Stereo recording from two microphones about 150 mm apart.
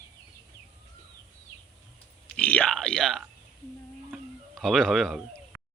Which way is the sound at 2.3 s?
10° left (ahead or behind).